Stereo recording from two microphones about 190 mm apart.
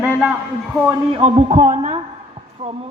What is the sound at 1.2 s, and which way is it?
Speech, 30° right (ahead or behind).